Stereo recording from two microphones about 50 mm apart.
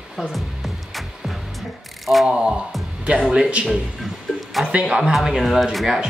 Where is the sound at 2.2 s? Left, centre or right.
Centre.